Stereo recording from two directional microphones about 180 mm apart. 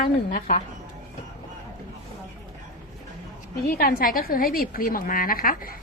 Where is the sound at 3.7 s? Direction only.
50° left (ahead or behind).